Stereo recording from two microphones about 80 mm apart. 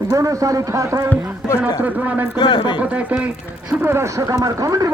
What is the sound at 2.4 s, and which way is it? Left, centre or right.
Speech, left.